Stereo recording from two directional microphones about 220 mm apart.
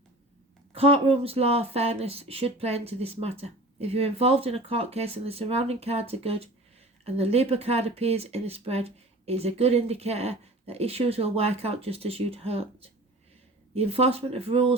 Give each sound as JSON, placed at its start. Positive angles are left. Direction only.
{"t": 0.7, "sound": "speech", "side_deg": -25}